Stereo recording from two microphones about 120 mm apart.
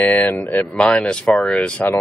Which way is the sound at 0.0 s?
15° left (ahead or behind).